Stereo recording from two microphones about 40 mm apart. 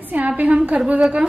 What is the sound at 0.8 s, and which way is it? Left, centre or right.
Speech, right.